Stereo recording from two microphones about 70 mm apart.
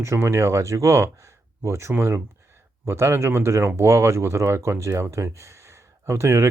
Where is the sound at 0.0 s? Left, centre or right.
Right.